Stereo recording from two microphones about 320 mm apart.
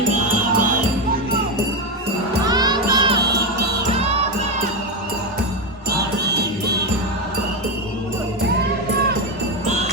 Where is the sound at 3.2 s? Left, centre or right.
Right.